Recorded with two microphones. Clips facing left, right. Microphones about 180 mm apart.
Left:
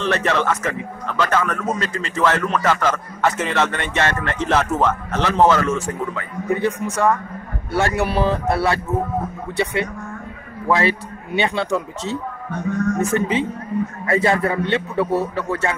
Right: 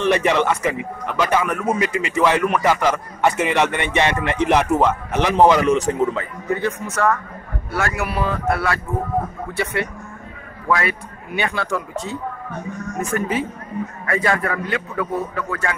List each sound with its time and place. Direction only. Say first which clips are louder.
0.0 s a man's voice: right 3 dB; 15° right (ahead or behind)
6.5 s speech: left 2 dB; 15° left (ahead or behind)
7.7 s a man's voice: left 4 dB; 30° left (ahead or behind)
10.7 s a man's voice: left 3 dB; 25° left (ahead or behind)